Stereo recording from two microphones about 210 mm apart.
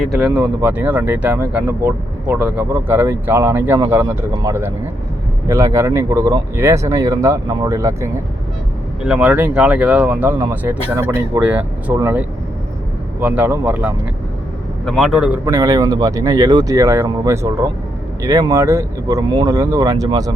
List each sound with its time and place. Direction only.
0.0 s a man's voice: centre (ahead or behind)
15.4 s speech: 15° right (ahead or behind)